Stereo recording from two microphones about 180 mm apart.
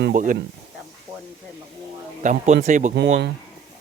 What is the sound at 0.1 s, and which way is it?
Speech, 50° right (ahead or behind).